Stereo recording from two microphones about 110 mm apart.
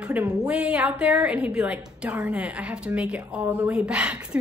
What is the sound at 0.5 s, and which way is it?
A woman's voice, 10° right (ahead or behind).